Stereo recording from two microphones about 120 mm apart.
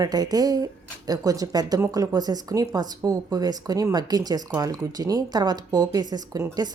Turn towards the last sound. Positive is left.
turn(degrees=-35)  # may be behind; listen again after turning